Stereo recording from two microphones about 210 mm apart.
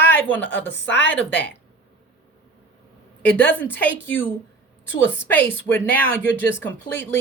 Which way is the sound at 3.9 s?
65° left (ahead or behind).